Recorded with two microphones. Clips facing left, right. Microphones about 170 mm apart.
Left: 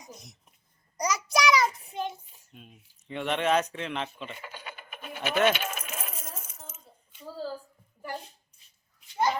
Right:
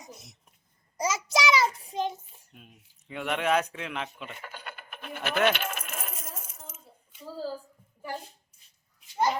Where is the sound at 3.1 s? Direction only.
5° right (ahead or behind).